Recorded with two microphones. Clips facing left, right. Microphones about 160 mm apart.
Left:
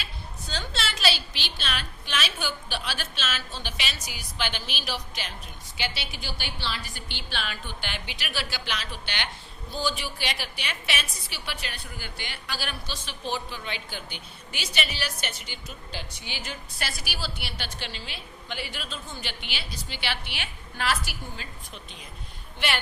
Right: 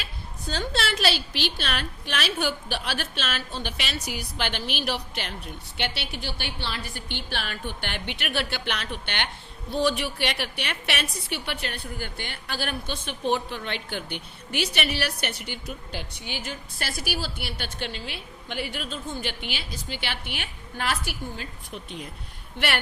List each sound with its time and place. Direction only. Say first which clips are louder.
0.0 s a woman's voice: right 3 dB; 50° right (ahead or behind)
22.5 s a woman's voice: right 2 dB; 65° right (ahead or behind)